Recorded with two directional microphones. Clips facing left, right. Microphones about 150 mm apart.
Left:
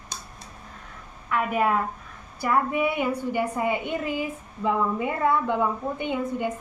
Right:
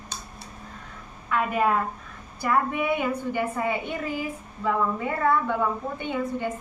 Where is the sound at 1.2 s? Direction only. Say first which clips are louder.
Even; 5° left (ahead or behind).